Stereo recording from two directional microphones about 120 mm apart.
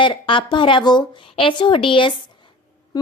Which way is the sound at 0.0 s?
45° left (ahead or behind).